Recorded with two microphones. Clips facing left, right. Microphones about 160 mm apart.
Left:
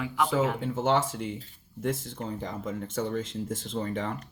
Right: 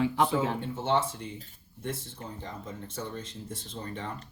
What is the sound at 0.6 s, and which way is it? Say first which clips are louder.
Speech: left 3 dB; 90° left.